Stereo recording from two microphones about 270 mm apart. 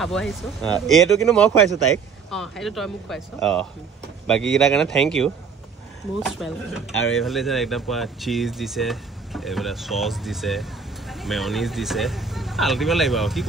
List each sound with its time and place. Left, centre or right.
0.0 s speech: centre